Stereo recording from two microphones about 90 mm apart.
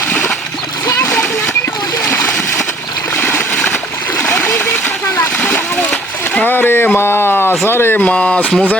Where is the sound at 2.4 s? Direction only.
30° left (ahead or behind).